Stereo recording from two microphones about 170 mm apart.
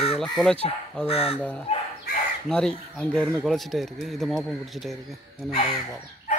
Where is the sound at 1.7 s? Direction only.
40° left (ahead or behind).